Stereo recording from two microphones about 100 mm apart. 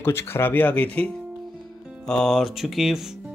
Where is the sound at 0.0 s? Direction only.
25° left (ahead or behind).